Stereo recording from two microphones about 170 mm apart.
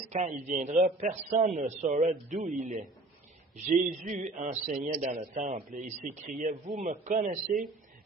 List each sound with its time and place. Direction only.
0.1 s a man's voice: 45° right (ahead or behind)
4.8 s a man's voice: 40° right (ahead or behind)